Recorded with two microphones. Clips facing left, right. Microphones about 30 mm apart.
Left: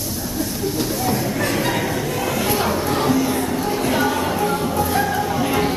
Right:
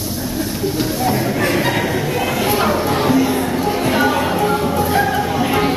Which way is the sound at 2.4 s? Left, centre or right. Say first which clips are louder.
Right 5 dB; centre.